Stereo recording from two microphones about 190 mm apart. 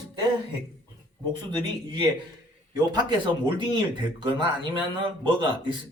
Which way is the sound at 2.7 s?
25° right (ahead or behind).